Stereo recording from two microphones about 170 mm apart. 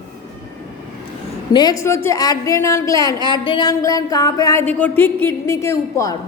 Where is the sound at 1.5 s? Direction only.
25° left (ahead or behind).